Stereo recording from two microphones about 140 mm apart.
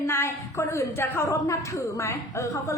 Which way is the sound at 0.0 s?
20° left (ahead or behind).